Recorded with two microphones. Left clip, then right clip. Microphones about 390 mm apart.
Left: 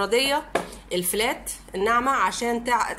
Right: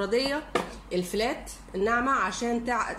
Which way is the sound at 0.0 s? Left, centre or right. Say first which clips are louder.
Left 5 dB; left.